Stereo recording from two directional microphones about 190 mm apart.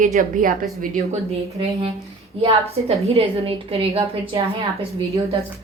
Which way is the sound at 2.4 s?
35° right (ahead or behind).